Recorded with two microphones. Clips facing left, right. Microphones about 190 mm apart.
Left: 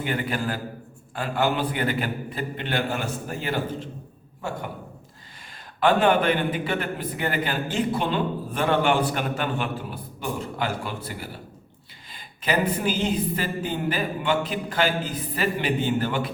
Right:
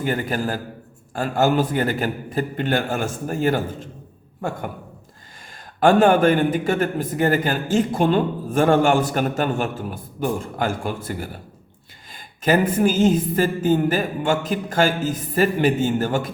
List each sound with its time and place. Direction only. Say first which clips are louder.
0.0 s a man's voice: right 4 dB; 45° right (ahead or behind)
5.8 s a man's voice: right 5 dB; 45° right (ahead or behind)